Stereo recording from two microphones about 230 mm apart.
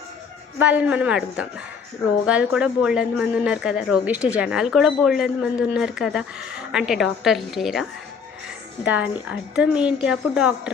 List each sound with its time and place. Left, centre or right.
0.6 s speech: centre